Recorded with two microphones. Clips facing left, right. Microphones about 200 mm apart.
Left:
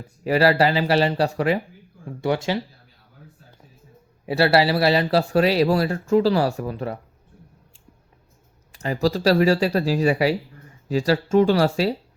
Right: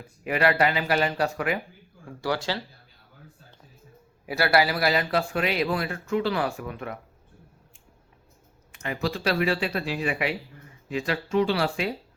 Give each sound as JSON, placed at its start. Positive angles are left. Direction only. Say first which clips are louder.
{"t": 0.3, "sound": "a man's voice", "louder": "left 5 dB", "side_deg": 35}
{"t": 2.0, "sound": "speech", "louder": "left 5 dB", "side_deg": 20}
{"t": 4.3, "sound": "a man's voice", "louder": "left 5 dB", "side_deg": 30}
{"t": 8.7, "sound": "a man's voice", "louder": "left 7 dB", "side_deg": 35}